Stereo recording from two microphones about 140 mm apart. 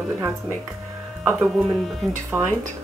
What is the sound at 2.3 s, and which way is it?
Speech, 15° right (ahead or behind).